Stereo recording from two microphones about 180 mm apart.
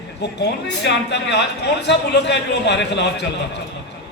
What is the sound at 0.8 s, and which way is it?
A man's voice, 75° left (ahead or behind).